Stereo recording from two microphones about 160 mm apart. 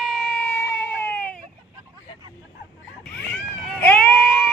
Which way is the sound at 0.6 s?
10° left (ahead or behind).